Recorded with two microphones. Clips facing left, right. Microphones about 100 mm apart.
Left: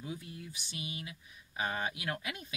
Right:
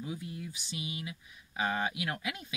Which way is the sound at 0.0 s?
20° right (ahead or behind).